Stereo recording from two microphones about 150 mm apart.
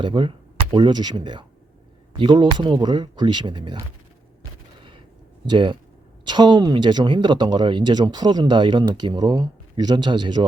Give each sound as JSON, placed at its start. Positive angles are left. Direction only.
{"t": 0.0, "sound": "speech", "side_deg": -35}
{"t": 5.5, "sound": "speech", "side_deg": -35}